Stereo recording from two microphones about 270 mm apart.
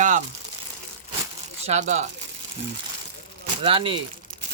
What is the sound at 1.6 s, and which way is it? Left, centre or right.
Speech, right.